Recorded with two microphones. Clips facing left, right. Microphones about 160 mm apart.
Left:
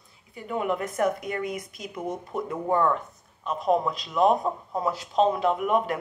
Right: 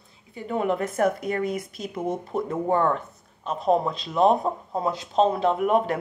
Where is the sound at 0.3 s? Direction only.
35° right (ahead or behind).